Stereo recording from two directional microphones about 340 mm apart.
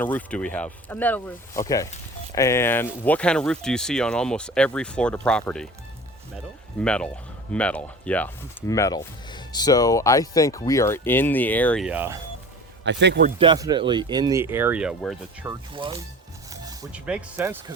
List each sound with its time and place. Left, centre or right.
0.0 s speech: centre
12.8 s speech: right
13.4 s speech: centre
15.7 s speech: centre